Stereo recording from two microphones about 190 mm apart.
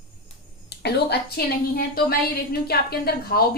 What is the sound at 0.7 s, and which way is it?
A woman's voice, 60° left (ahead or behind).